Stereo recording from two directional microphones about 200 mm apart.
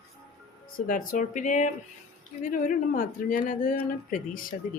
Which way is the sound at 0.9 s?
40° left (ahead or behind).